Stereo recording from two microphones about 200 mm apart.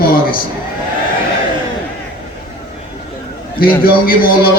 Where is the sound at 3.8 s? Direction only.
45° left (ahead or behind).